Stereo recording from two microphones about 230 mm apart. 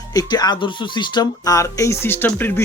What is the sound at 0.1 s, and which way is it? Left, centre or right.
Speech, centre.